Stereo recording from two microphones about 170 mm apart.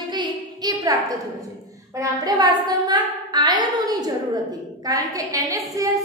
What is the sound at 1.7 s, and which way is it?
A woman's voice, 20° right (ahead or behind).